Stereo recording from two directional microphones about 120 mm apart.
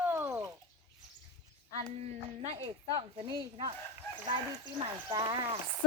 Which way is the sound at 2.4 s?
60° right (ahead or behind).